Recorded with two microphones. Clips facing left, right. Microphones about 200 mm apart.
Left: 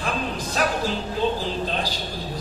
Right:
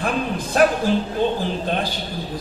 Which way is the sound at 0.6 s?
55° right (ahead or behind).